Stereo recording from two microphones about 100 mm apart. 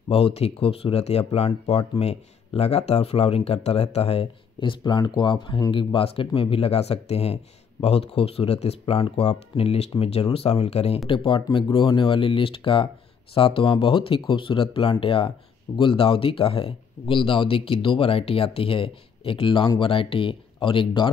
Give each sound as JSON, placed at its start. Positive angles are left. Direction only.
{"t": 0.1, "sound": "speech", "side_deg": 85}
{"t": 11.1, "sound": "speech", "side_deg": 55}